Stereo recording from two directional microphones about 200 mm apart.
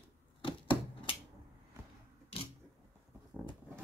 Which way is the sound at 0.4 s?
25° left (ahead or behind).